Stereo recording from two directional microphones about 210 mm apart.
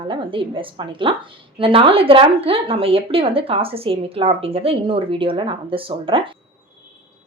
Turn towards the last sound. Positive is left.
turn(degrees=-25)  # may be behind; listen again after turning